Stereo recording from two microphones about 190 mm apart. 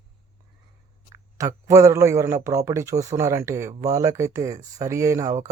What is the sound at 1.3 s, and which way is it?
Speech, 15° right (ahead or behind).